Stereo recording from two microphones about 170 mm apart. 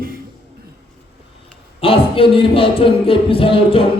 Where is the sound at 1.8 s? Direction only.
30° left (ahead or behind).